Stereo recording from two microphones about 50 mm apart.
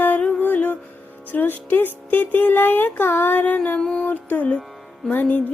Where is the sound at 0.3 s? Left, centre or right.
Left.